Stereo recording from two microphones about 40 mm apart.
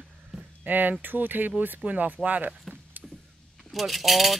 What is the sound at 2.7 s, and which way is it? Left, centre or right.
Vehicle, centre.